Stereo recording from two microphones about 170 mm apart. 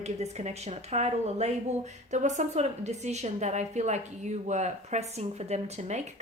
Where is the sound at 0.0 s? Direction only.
40° right (ahead or behind).